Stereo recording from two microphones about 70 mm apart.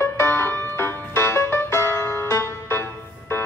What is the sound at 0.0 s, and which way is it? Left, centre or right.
Music, left.